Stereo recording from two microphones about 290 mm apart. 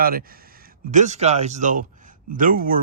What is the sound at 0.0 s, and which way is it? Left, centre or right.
Speech, right.